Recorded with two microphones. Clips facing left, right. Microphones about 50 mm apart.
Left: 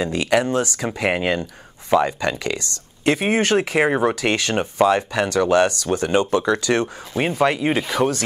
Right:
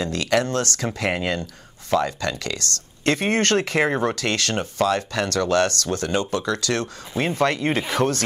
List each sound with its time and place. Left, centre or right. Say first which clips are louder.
0.0 s speech: left 3 dB; centre